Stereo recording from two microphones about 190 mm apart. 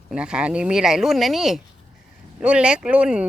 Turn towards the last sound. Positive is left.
turn(degrees=-5)  # may be behind; listen again after turning